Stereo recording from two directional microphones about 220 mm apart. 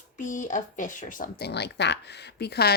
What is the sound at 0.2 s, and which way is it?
Speech, 35° left (ahead or behind).